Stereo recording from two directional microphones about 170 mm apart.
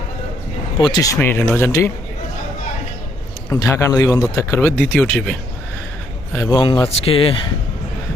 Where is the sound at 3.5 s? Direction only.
20° left (ahead or behind).